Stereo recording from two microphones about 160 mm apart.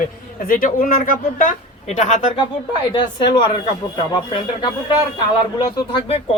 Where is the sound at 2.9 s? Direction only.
30° left (ahead or behind).